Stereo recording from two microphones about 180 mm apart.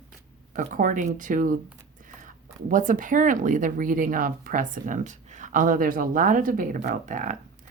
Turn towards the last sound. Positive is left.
turn(degrees=-45)  # may be behind; listen again after turning